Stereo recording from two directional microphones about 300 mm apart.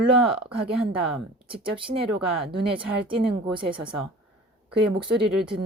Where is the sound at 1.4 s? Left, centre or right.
Centre.